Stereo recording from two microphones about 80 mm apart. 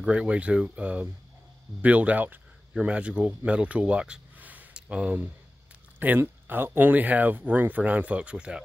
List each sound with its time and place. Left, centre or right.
0.0 s speech: centre